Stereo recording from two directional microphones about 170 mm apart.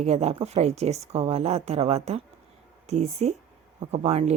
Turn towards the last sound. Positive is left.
turn(degrees=-40)  # may be behind; listen again after turning